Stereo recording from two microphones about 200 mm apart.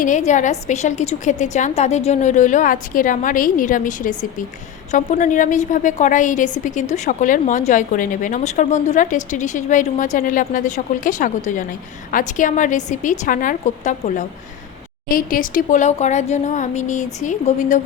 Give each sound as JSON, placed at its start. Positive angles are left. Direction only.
{"t": 0.0, "sound": "a woman's voice", "side_deg": 40}